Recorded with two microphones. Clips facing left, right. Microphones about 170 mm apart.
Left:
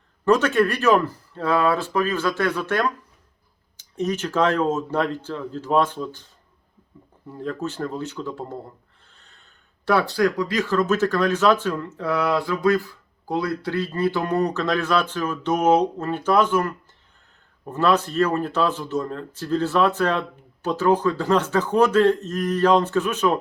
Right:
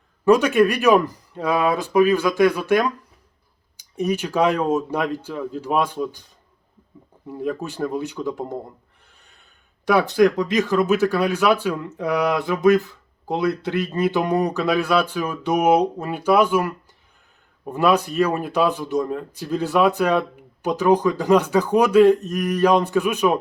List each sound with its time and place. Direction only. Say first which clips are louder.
0.3 s speech: right 3 dB; 15° right (ahead or behind)
7.3 s speech: right 2 dB; 10° right (ahead or behind)
9.0 s snort: left 1 dB; 15° right (ahead or behind)
9.8 s speech: right 4 dB; 15° right (ahead or behind)